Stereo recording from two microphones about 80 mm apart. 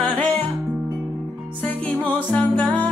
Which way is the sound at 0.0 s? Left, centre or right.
Centre.